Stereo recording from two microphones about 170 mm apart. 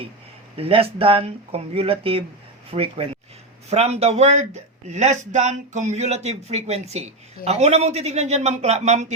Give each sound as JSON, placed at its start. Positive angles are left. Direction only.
{"t": 0.5, "sound": "speech", "side_deg": -35}